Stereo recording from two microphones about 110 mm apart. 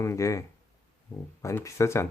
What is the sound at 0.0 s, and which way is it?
Speech, 25° left (ahead or behind).